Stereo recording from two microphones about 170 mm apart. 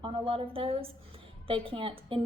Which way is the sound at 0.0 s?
30° right (ahead or behind).